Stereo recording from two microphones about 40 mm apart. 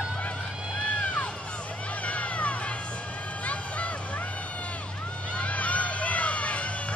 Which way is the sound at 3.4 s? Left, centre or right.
Left.